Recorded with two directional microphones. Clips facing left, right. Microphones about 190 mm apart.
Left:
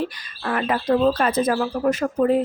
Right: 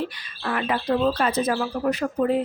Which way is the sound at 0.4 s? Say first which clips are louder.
Left 3 dB; 45° left (ahead or behind).